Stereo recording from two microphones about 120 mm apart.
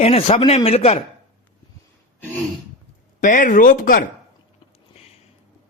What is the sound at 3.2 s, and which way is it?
Speech, 90° left.